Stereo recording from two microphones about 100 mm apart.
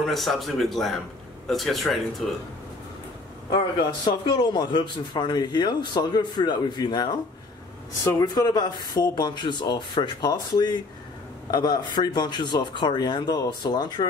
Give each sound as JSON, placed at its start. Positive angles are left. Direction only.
{"t": 0.0, "sound": "speech", "side_deg": 0}
{"t": 3.5, "sound": "a man's voice", "side_deg": 45}